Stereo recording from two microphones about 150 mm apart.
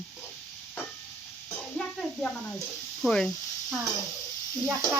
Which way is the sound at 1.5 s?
5° left (ahead or behind).